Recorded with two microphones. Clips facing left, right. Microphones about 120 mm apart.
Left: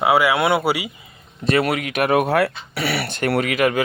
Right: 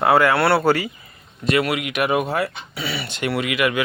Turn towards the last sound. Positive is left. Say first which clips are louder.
# left 3 dB
turn(degrees=40)  # may be behind; listen again after turning